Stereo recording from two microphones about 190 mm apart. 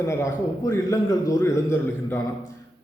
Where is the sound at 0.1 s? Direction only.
15° left (ahead or behind).